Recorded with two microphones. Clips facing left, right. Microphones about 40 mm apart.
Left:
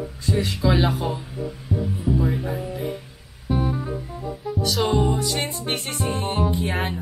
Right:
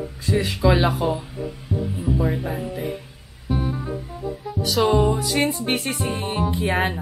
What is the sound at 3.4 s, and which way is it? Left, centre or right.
Music, centre.